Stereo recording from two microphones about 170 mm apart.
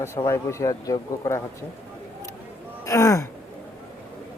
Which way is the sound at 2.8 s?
20° left (ahead or behind).